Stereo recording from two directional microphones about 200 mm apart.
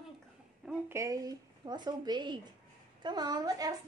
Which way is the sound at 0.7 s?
15° right (ahead or behind).